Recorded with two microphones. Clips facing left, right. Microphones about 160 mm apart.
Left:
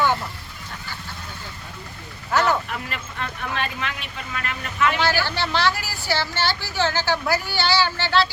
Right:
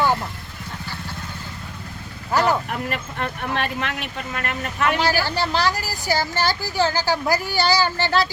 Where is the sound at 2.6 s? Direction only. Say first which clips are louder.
Right 5 dB; 50° right (ahead or behind).